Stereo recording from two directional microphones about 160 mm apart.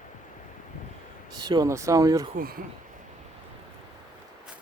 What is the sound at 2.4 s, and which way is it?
Speech, 65° right (ahead or behind).